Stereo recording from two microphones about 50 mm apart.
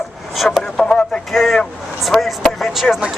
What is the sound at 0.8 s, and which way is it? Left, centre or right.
Radio, centre.